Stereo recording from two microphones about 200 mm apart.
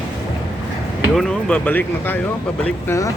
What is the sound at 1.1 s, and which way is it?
Speech, centre (ahead or behind).